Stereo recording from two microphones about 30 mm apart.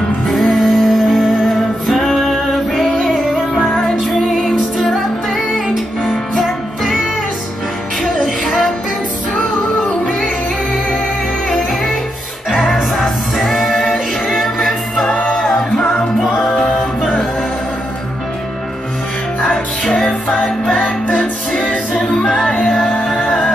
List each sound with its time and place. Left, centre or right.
0.3 s music: centre
4.1 s music: centre
8.0 s music: centre
13.4 s music: centre
20.7 s music: left
21.9 s music: left